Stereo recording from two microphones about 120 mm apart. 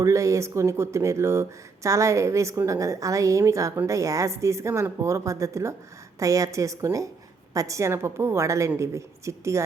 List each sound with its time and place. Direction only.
0.0 s speech: 25° right (ahead or behind)